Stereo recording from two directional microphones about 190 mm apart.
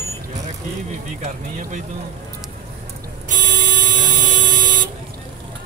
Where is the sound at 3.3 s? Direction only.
45° right (ahead or behind).